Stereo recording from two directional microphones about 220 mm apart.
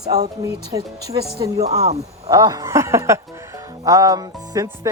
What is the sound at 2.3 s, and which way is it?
Speech, 15° right (ahead or behind).